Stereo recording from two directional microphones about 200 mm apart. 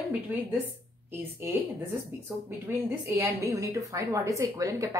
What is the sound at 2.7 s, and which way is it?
A woman's voice, 10° right (ahead or behind).